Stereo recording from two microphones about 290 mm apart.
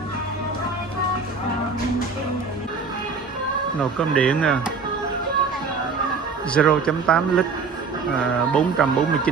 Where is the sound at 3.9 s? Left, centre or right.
Centre.